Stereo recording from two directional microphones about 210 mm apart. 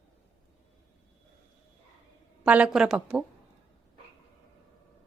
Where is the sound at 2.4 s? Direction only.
5° right (ahead or behind).